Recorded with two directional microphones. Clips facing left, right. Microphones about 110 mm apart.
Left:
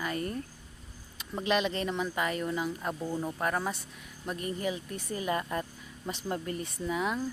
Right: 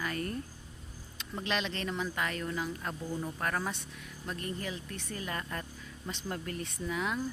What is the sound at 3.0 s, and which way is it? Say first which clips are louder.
Speech: left 3 dB; 25° left (ahead or behind).